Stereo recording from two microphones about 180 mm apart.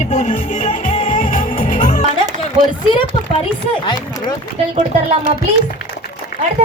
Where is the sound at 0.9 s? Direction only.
45° left (ahead or behind).